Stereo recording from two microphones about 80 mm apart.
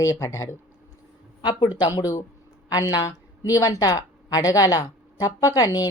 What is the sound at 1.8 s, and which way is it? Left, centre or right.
A woman's voice, left.